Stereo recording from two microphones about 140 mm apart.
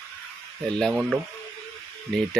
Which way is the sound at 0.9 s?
10° right (ahead or behind).